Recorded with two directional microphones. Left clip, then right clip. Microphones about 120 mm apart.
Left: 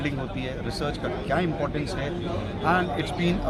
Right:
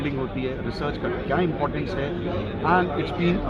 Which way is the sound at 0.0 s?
35° left (ahead or behind).